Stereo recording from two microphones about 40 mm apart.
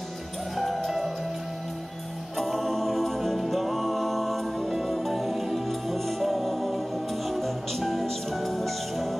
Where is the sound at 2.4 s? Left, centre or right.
Centre.